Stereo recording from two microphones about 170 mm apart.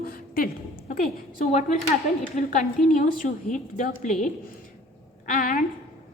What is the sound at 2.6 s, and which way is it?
A woman's voice, 55° left (ahead or behind).